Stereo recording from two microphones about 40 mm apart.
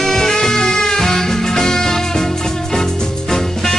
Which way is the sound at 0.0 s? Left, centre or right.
Centre.